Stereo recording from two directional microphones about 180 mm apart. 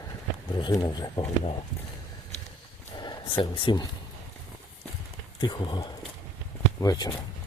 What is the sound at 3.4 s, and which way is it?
Speech, 25° left (ahead or behind).